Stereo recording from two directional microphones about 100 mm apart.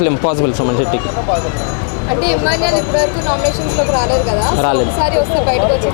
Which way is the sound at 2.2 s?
15° left (ahead or behind).